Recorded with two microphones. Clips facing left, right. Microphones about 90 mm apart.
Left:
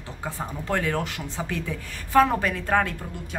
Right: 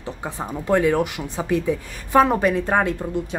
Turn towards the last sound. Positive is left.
turn(degrees=-20)  # may be behind; listen again after turning